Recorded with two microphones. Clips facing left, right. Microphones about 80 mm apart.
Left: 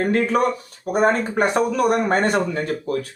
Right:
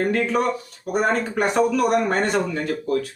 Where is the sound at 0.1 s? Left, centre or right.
Left.